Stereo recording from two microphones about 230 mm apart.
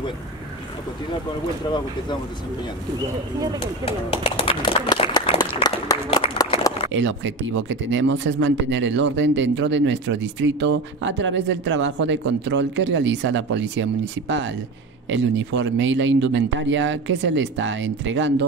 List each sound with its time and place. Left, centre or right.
3.8 s speech: left
6.9 s speech: right
15.0 s speech: right